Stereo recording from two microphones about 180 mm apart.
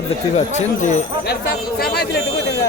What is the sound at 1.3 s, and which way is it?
Speech, 60° left (ahead or behind).